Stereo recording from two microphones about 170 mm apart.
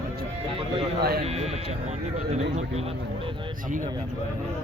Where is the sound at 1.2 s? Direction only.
35° right (ahead or behind).